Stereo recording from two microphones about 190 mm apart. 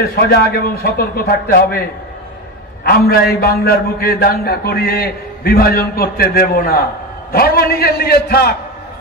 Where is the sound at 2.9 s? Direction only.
55° left (ahead or behind).